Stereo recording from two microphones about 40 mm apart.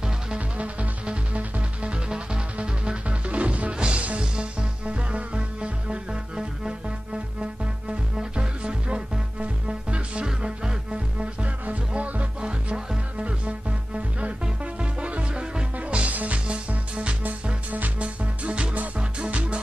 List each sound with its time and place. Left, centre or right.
0.6 s music: right
8.2 s music: right
11.4 s music: right
12.4 s music: right
17.7 s music: right
18.0 s music: right